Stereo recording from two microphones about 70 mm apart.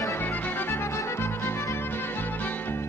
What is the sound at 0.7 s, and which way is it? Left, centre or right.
Music, left.